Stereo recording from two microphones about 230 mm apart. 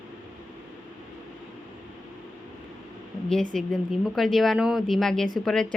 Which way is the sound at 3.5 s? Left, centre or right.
Centre.